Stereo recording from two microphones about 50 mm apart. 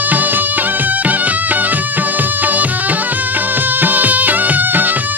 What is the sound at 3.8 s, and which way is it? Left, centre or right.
Music, right.